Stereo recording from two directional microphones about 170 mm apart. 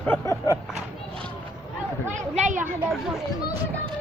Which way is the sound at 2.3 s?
45° right (ahead or behind).